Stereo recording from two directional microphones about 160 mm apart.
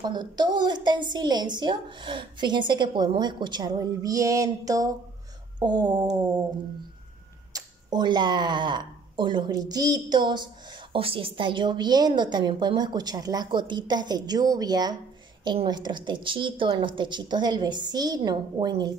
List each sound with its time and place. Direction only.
0.0 s speech: 25° right (ahead or behind)
7.5 s speech: 25° right (ahead or behind)